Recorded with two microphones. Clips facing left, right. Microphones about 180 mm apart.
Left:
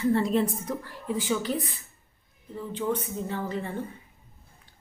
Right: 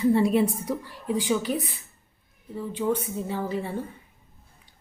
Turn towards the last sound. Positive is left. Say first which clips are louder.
# right 2 dB
turn(degrees=-10)  # may be behind; listen again after turning